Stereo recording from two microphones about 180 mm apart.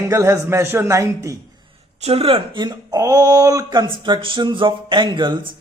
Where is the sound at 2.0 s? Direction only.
35° right (ahead or behind).